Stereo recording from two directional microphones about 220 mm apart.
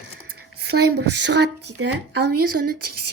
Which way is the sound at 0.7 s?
50° right (ahead or behind).